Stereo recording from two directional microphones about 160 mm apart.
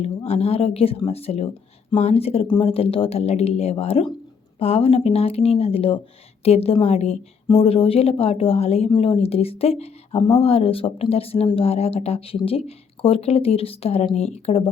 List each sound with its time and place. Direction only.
0.0 s speech: 40° left (ahead or behind)